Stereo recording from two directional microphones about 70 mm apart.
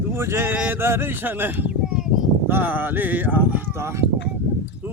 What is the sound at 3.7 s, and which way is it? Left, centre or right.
Mantra, right.